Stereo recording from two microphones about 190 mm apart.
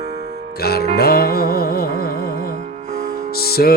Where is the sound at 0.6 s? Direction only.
55° left (ahead or behind).